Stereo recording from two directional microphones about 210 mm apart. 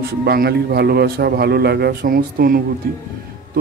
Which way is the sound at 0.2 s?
50° right (ahead or behind).